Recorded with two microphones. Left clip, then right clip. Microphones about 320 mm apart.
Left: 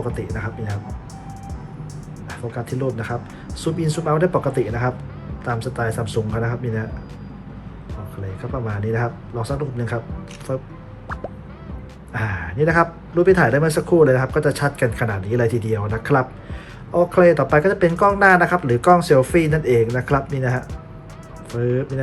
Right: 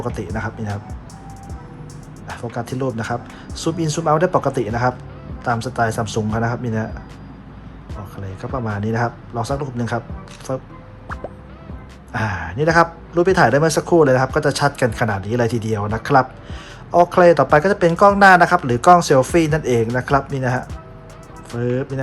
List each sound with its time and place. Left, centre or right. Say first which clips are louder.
0.0 s a man's voice: right 2 dB; centre
2.2 s a man's voice: right 3 dB; centre
8.4 s a man's voice: right 3 dB; centre
12.1 s a man's voice: right 2 dB; centre